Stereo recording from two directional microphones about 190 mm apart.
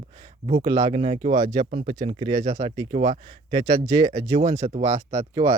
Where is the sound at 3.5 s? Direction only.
20° right (ahead or behind).